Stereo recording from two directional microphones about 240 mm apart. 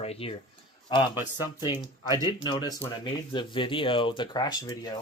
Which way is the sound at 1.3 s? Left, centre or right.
Centre.